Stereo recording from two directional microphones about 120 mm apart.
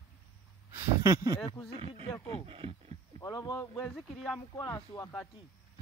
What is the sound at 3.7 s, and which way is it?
Speech, centre (ahead or behind).